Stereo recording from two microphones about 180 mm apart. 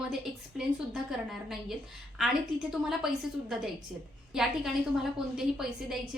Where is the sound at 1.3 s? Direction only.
Centre (ahead or behind).